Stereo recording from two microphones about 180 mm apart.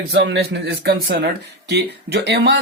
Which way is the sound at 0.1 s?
80° right.